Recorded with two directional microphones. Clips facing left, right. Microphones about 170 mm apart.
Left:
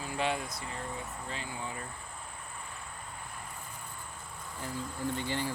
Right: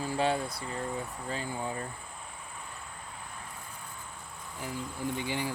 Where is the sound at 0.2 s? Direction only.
35° right (ahead or behind).